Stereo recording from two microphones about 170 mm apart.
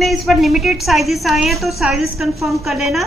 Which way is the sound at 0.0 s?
Centre (ahead or behind).